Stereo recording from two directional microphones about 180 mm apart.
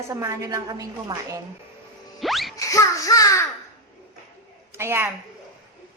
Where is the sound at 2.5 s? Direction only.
20° left (ahead or behind).